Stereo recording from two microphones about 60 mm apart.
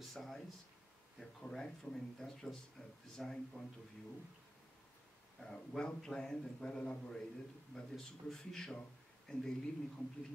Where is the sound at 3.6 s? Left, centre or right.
Centre.